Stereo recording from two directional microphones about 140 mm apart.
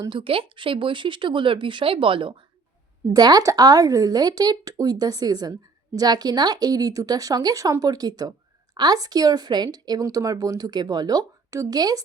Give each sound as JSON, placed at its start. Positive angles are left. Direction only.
{"t": 0.0, "sound": "speech", "side_deg": -40}
{"t": 3.1, "sound": "speech", "side_deg": -25}